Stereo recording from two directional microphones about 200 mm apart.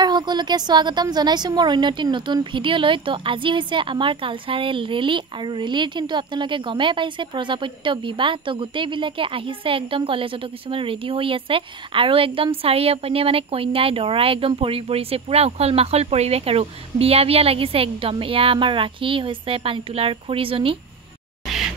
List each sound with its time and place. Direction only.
0.0 s a woman's voice: 20° right (ahead or behind)